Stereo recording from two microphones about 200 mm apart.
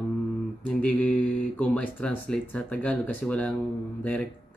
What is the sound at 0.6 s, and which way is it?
Speech, 5° left (ahead or behind).